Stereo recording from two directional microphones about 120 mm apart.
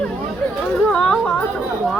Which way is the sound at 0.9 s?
10° left (ahead or behind).